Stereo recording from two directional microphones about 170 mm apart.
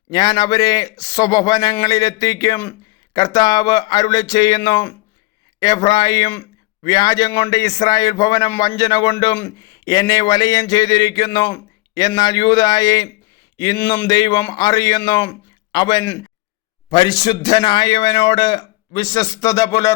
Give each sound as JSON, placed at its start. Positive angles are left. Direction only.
{"t": 0.1, "sound": "speech", "side_deg": 25}
{"t": 6.3, "sound": "a sound", "side_deg": 15}
{"t": 6.9, "sound": "speech", "side_deg": 25}
{"t": 9.1, "sound": "speech", "side_deg": 15}